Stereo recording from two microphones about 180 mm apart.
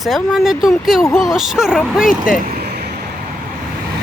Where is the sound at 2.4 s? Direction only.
55° right (ahead or behind).